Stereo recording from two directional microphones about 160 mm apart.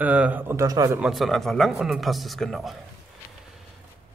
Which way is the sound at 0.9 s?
Centre (ahead or behind).